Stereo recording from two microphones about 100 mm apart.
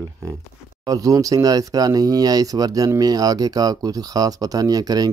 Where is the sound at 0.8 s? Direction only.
35° right (ahead or behind).